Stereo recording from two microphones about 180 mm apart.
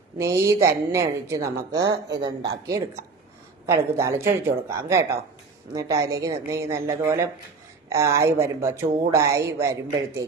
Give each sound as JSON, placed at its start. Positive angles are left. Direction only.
{"t": 0.2, "sound": "a woman's voice", "side_deg": -15}
{"t": 3.7, "sound": "a woman's voice", "side_deg": -15}